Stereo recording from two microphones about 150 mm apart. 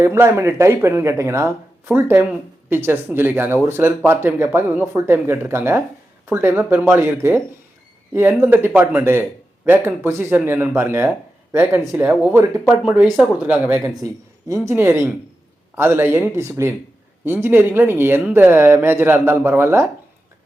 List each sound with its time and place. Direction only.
0.0 s speech: 15° right (ahead or behind)
13.8 s speech: 20° right (ahead or behind)